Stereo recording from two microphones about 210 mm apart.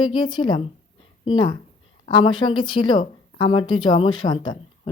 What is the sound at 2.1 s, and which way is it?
Speech, 20° left (ahead or behind).